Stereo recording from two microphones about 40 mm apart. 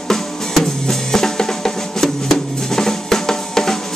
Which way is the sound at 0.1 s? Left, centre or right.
Centre.